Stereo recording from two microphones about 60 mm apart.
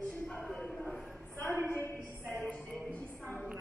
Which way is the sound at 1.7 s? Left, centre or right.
Left.